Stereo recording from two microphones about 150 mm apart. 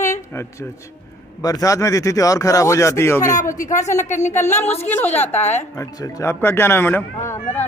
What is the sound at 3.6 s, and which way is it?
Speech, 55° left (ahead or behind).